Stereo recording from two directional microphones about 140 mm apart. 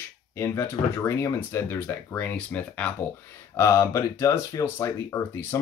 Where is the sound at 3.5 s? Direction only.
20° left (ahead or behind).